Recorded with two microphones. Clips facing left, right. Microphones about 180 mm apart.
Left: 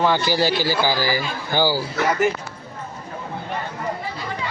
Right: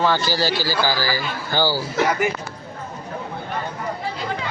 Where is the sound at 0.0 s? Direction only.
15° left (ahead or behind).